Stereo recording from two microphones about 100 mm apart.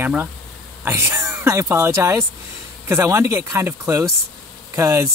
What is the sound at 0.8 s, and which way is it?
Speech, 25° right (ahead or behind).